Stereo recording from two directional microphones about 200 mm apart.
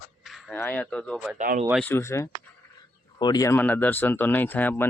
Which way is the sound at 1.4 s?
40° right (ahead or behind).